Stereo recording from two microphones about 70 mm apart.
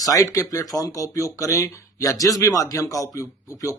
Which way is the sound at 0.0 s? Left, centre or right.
Left.